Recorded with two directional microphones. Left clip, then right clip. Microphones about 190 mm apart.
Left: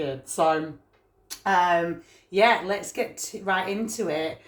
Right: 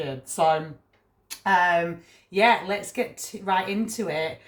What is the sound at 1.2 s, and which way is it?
Speech, 15° left (ahead or behind).